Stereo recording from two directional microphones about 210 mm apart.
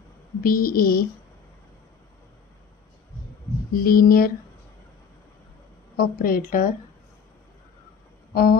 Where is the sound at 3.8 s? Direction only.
45° left (ahead or behind).